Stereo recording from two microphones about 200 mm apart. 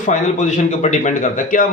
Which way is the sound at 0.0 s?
35° left (ahead or behind).